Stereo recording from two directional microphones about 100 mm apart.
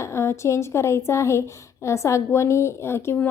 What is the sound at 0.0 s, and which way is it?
A woman's voice, 25° left (ahead or behind).